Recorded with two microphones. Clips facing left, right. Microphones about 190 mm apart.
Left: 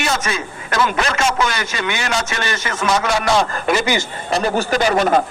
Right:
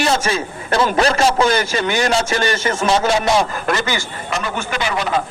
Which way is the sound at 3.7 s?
15° left (ahead or behind).